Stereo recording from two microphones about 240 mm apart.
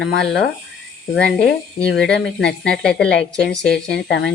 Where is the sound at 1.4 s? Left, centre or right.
Left.